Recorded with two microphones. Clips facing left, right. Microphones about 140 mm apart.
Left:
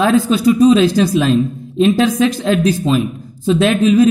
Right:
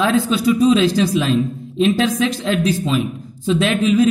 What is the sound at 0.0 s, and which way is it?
A man's voice, 45° left (ahead or behind).